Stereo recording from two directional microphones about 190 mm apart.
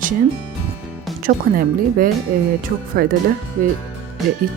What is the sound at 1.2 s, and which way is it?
Speech, 50° right (ahead or behind).